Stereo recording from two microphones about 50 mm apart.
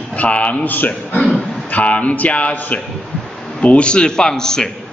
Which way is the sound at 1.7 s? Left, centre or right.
Left.